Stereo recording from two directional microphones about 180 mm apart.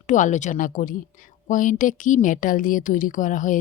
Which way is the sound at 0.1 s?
45° left (ahead or behind).